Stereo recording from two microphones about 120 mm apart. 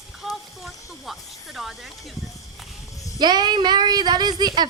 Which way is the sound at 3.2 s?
35° right (ahead or behind).